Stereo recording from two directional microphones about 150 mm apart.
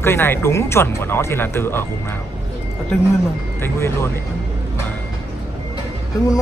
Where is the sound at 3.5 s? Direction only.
15° left (ahead or behind).